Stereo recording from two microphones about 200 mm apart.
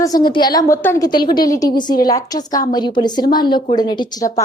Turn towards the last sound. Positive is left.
turn(degrees=20)  # may be behind; listen again after turning